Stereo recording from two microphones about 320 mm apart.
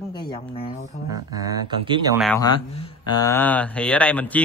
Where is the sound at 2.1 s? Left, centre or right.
Centre.